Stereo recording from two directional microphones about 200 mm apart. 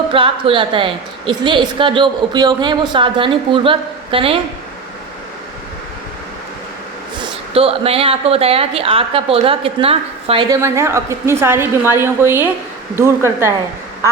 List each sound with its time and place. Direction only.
0.1 s a woman's voice: 25° right (ahead or behind)
7.2 s a woman's voice: 30° right (ahead or behind)
10.5 s a woman's voice: 15° right (ahead or behind)